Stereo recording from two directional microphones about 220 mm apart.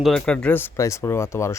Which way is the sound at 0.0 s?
Centre (ahead or behind).